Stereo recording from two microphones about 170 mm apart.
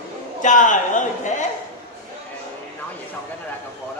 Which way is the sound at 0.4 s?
50° left (ahead or behind).